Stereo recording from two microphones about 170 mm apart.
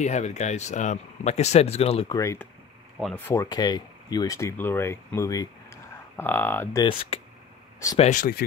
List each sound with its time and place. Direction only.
0.0 s speech: 40° left (ahead or behind)
2.1 s speech: 20° left (ahead or behind)
6.8 s speech: 30° left (ahead or behind)
8.0 s speech: 50° left (ahead or behind)